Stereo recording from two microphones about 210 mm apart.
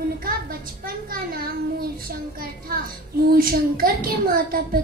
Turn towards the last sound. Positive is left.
turn(degrees=-45)  # may be behind; listen again after turning